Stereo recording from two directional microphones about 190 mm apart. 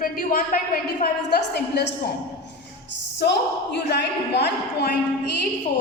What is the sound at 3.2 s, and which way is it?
A woman's voice, 65° left (ahead or behind).